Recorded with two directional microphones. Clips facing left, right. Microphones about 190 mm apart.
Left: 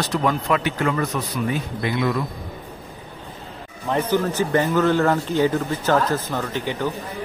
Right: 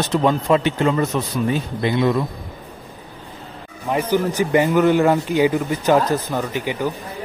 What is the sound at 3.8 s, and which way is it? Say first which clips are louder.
Speech: right 2 dB; 10° right (ahead or behind).